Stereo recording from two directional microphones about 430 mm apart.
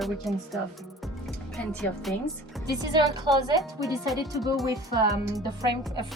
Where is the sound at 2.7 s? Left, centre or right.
Centre.